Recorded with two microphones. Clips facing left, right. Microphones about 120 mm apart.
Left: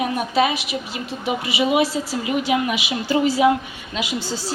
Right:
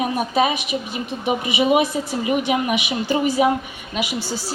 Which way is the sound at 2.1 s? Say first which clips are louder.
Right 2 dB; 55° right (ahead or behind).